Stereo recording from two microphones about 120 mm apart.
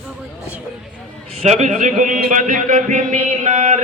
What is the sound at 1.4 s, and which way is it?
A man's voice, 75° right (ahead or behind).